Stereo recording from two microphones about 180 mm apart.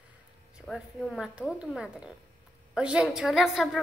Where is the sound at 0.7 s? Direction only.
Centre (ahead or behind).